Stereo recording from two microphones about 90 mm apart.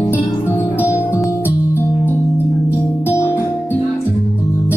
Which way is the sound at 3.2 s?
30° left (ahead or behind).